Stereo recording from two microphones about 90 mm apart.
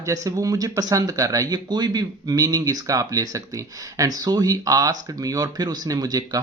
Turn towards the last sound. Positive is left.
turn(degrees=-45)  # may be behind; listen again after turning